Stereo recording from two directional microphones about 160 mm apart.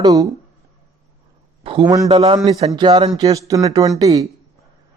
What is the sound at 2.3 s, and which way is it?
Speech, 25° right (ahead or behind).